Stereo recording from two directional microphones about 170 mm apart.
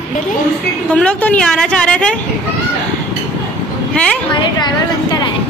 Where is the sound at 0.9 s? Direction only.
5° left (ahead or behind).